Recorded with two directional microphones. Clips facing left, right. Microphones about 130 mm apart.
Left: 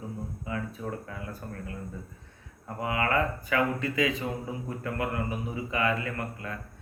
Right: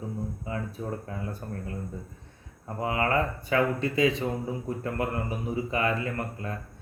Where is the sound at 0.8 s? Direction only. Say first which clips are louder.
Right 2 dB; 30° right (ahead or behind).